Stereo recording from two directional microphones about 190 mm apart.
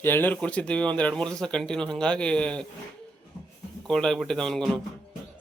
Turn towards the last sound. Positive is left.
turn(degrees=5)  # may be behind; listen again after turning